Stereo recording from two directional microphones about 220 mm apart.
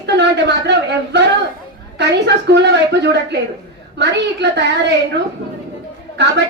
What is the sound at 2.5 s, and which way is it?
A woman's voice, 50° right (ahead or behind).